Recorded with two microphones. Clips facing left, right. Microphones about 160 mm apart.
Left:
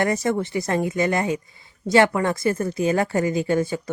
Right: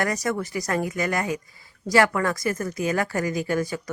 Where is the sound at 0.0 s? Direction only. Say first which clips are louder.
Left 4 dB; 25° left (ahead or behind).